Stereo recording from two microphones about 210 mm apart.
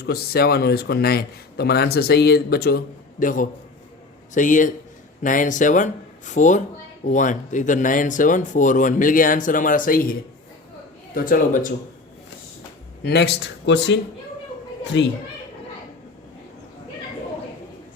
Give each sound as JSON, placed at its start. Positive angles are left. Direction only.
{"t": 0.0, "sound": "speech", "side_deg": 50}
{"t": 13.0, "sound": "speech", "side_deg": 50}